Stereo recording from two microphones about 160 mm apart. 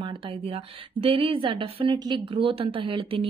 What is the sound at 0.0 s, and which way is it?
Speech, 30° right (ahead or behind).